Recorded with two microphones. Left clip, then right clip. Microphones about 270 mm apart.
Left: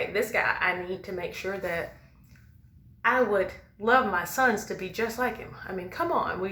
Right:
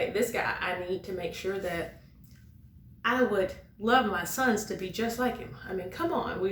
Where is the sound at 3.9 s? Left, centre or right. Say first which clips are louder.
Left 2 dB; centre.